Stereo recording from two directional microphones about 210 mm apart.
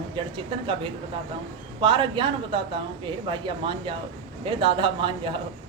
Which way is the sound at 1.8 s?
25° right (ahead or behind).